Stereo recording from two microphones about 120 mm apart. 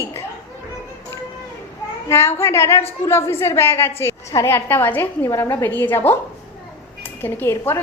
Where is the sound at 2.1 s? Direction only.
20° left (ahead or behind).